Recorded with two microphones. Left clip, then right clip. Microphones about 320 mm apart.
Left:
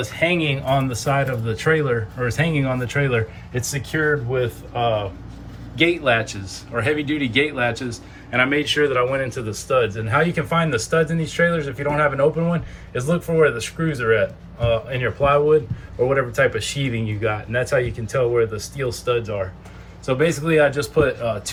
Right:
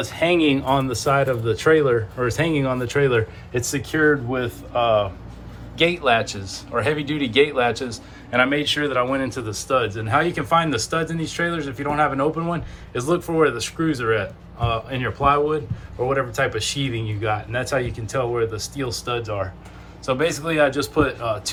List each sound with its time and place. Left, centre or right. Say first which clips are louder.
0.0 s a man's voice: right 2 dB; centre
6.0 s a man's voice: even; centre